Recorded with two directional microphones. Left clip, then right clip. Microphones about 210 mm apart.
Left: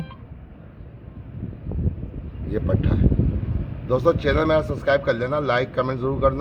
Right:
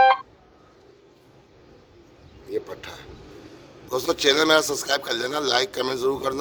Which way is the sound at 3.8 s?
45° right (ahead or behind).